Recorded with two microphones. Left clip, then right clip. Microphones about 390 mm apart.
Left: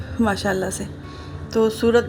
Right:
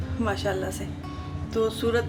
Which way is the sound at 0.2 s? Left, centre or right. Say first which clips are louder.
Left 6 dB; centre.